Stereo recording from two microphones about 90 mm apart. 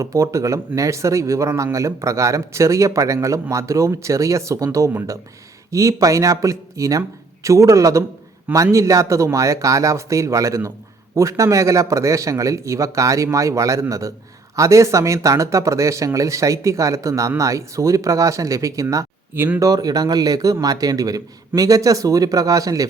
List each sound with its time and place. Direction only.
0.0 s speech: 35° right (ahead or behind)